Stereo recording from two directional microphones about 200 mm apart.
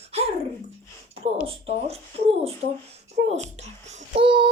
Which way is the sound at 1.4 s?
30° right (ahead or behind).